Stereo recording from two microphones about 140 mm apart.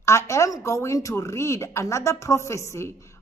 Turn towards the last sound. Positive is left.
turn(degrees=20)  # may be behind; listen again after turning